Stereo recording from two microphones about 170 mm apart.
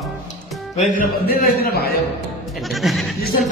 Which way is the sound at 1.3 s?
60° left (ahead or behind).